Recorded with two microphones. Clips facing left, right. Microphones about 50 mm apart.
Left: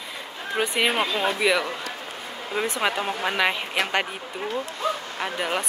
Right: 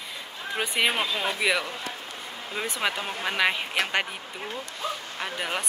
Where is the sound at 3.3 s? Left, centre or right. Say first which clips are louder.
Even; centre.